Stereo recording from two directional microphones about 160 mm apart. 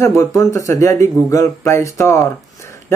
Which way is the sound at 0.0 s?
20° left (ahead or behind).